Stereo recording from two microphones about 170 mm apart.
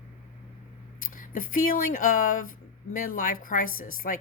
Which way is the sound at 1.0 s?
50° left (ahead or behind).